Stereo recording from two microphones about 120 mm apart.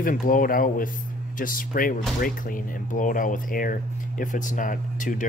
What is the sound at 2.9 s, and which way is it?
Speech, 90° left.